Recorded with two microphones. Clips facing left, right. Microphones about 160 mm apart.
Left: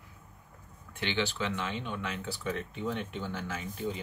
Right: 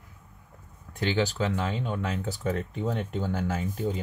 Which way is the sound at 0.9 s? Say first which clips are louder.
Right 6 dB; 40° right (ahead or behind).